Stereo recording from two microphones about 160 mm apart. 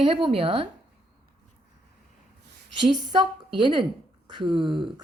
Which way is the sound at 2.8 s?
30° right (ahead or behind).